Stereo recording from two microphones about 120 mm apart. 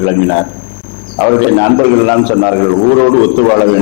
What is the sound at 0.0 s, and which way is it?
A man's voice, 20° left (ahead or behind).